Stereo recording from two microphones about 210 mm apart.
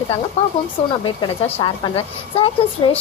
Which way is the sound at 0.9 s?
25° left (ahead or behind).